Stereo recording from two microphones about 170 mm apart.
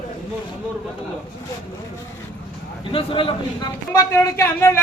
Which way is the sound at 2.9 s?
30° left (ahead or behind).